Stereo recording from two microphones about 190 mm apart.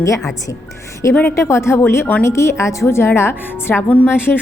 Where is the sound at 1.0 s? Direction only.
15° left (ahead or behind).